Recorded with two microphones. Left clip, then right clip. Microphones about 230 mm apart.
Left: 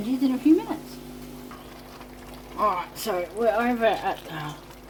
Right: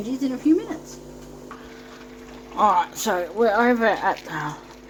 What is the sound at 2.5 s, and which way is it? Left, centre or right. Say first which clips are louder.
Speech: right 6 dB; right.